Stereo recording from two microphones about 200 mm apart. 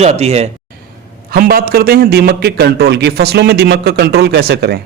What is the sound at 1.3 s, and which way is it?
A man's voice, 50° right (ahead or behind).